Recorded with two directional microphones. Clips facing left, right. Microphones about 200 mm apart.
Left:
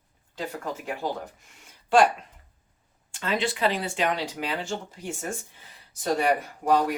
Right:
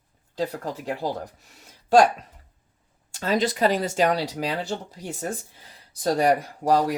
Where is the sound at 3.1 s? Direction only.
40° right (ahead or behind).